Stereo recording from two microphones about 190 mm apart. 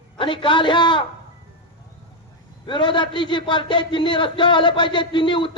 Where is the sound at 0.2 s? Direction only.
25° left (ahead or behind).